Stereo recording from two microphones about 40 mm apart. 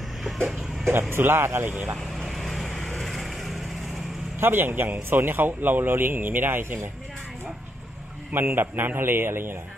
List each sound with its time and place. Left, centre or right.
0.5 s speech: centre
1.1 s a man's voice: right
1.6 s speech: right
2.0 s vehicle: centre
4.4 s a man's voice: right
8.3 s a man's voice: right